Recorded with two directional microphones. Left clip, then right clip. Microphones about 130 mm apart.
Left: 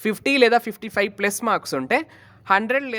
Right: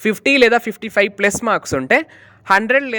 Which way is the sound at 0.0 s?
25° right (ahead or behind).